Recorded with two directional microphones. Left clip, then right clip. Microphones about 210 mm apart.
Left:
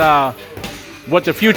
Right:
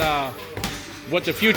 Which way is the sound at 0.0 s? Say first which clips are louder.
Left 10 dB; 40° left (ahead or behind).